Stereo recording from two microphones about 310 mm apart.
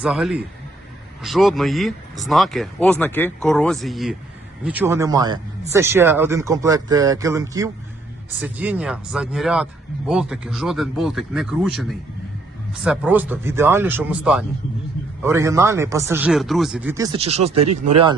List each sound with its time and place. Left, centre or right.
0.0 s speech: centre
17.6 s speech: right